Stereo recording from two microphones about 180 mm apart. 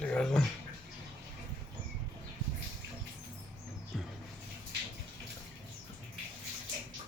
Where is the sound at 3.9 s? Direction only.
5° left (ahead or behind).